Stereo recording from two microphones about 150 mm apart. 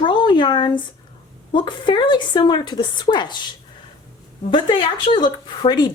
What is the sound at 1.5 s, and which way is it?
A woman's voice, 30° left (ahead or behind).